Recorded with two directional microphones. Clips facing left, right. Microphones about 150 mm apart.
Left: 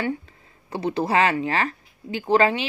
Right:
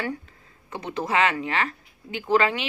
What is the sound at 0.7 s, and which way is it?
Speech, 30° left (ahead or behind).